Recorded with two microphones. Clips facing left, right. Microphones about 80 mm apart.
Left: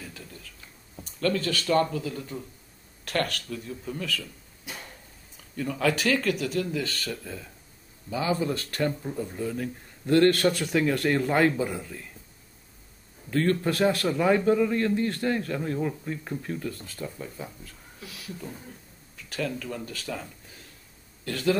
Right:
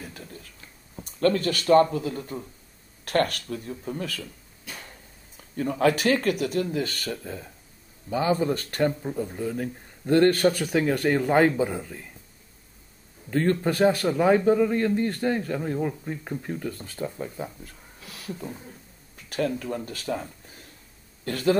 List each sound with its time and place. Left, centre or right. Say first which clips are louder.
0.0 s a sound: right 2 dB; right
1.2 s speech: right 4 dB; right
5.4 s speech: right 4 dB; right
8.8 s a man's voice: right 4 dB; centre
10.6 s a man's voice: right 1 dB; centre
13.3 s a man's voice: right 1 dB; right
16.5 s speech: right 2 dB; right
18.0 s a sound: right 2 dB; right
19.1 s speech: right 4 dB; right